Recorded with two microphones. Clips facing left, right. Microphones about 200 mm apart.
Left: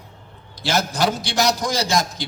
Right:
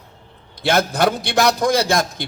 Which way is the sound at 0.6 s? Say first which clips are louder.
Right 4 dB; 60° right (ahead or behind).